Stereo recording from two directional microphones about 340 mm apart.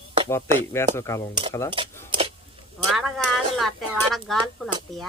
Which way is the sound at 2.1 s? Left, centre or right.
Centre.